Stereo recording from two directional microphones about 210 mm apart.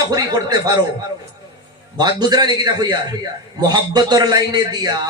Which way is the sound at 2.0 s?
20° right (ahead or behind).